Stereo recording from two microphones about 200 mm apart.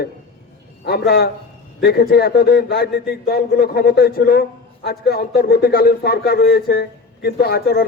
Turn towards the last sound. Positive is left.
turn(degrees=50)  # may be behind; listen again after turning